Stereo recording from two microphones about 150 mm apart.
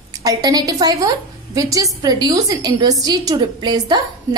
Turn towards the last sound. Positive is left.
turn(degrees=-30)  # may be behind; listen again after turning